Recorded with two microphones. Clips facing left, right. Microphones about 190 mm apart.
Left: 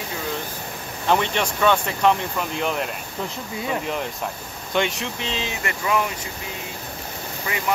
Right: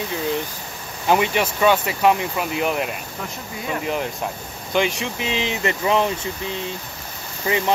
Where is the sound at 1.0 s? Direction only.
10° right (ahead or behind).